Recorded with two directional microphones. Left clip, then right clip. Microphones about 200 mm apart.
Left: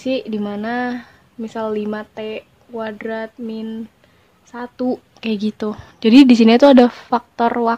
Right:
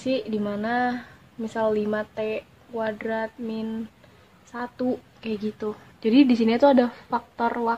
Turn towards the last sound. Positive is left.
turn(degrees=50)  # may be behind; listen again after turning